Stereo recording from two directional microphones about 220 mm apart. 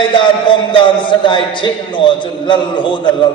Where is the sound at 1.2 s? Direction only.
20° left (ahead or behind).